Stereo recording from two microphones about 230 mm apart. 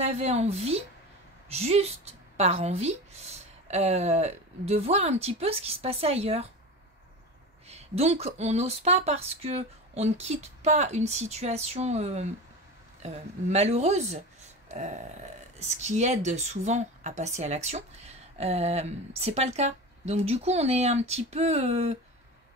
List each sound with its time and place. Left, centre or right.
0.0 s speech: right
7.6 s speech: right
14.7 s a sound: right
15.6 s speech: right